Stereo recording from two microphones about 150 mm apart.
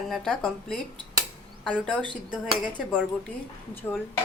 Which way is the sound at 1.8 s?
5° left (ahead or behind).